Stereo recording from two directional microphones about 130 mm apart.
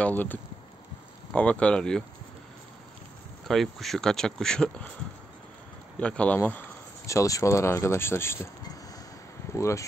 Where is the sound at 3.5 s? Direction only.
Centre (ahead or behind).